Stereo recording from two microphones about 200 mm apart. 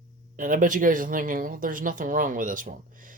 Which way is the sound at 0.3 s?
40° right (ahead or behind).